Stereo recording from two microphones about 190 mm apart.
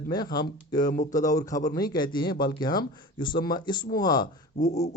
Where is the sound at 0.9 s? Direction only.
45° left (ahead or behind).